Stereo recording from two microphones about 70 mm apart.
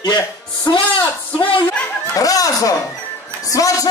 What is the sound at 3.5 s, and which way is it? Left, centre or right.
Music, left.